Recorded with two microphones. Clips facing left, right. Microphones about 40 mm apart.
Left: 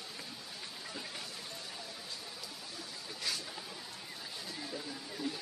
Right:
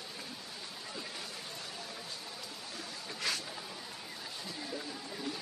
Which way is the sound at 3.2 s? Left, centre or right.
Right.